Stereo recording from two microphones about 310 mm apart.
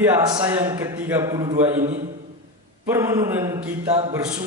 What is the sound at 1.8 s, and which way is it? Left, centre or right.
Speech, right.